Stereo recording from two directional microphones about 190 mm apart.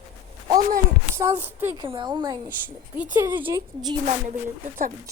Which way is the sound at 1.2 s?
10° right (ahead or behind).